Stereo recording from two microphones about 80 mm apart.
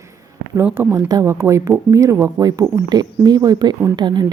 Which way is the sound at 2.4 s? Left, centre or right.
Right.